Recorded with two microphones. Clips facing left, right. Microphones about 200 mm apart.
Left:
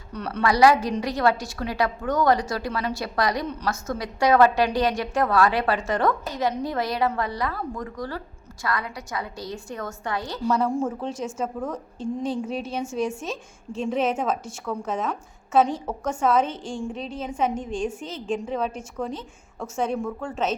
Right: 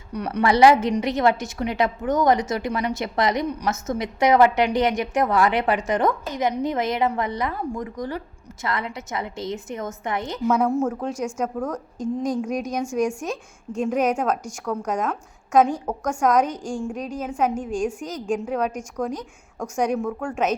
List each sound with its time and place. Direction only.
0.1 s a woman's voice: 15° right (ahead or behind)
11.4 s a woman's voice: 5° left (ahead or behind)
12.0 s a woman's voice: 5° right (ahead or behind)
14.6 s speech: 5° left (ahead or behind)
14.9 s a woman's voice: 10° right (ahead or behind)